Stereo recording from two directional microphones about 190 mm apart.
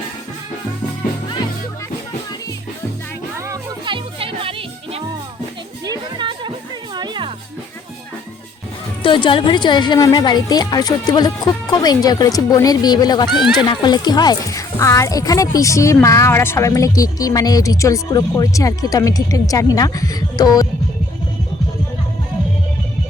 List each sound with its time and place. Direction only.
3.4 s music: 20° right (ahead or behind)
9.0 s a woman's voice: 25° left (ahead or behind)
13.4 s speech: centre (ahead or behind)
13.7 s a woman's voice: 20° left (ahead or behind)